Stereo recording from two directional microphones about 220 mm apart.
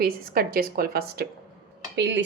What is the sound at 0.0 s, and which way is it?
Speech, 40° right (ahead or behind).